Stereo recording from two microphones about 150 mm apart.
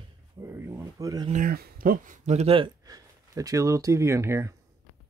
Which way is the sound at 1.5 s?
85° right.